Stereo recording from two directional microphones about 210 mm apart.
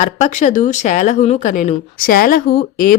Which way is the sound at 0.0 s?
35° left (ahead or behind).